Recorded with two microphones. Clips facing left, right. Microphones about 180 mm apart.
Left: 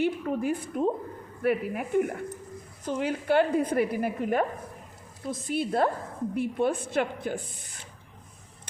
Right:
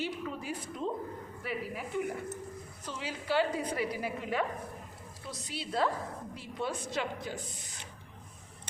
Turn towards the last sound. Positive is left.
turn(degrees=55)  # may be behind; listen again after turning